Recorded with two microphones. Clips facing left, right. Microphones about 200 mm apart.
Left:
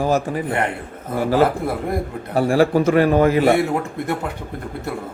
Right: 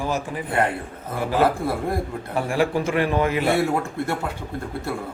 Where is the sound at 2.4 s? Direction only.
35° left (ahead or behind).